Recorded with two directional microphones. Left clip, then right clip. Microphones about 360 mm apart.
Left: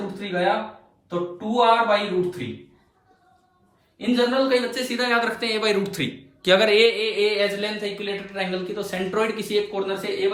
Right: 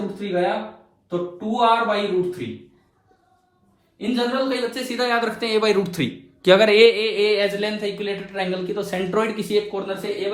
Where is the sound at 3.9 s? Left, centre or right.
Centre.